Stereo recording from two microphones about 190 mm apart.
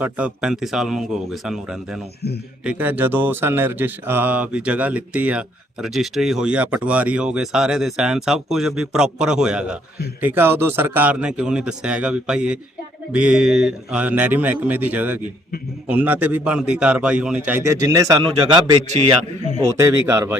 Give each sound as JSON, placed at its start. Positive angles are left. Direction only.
{"t": 0.0, "sound": "a man's voice", "side_deg": -5}
{"t": 19.7, "sound": "a man's voice", "side_deg": -15}